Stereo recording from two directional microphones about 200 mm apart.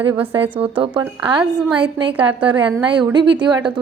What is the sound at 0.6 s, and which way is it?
A woman's voice, 25° right (ahead or behind).